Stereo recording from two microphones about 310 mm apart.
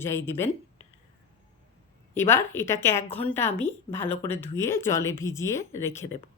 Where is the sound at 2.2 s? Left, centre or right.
Centre.